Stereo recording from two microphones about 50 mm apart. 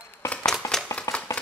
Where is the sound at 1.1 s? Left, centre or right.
Left.